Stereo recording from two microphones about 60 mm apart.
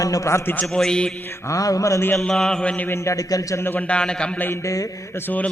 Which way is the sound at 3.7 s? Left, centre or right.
Centre.